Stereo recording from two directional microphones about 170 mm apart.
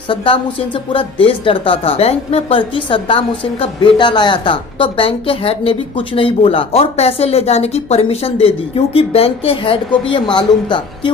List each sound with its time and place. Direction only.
0.9 s speech: 30° left (ahead or behind)